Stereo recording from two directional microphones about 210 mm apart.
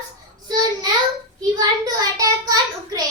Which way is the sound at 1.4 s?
15° right (ahead or behind).